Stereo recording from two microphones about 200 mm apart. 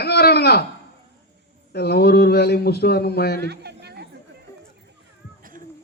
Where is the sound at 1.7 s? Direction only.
55° left (ahead or behind).